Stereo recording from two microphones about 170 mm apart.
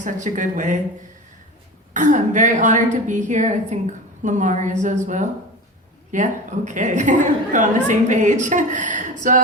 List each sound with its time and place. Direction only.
0.0 s a woman's voice: 50° right (ahead or behind)
1.9 s a woman's voice: 45° right (ahead or behind)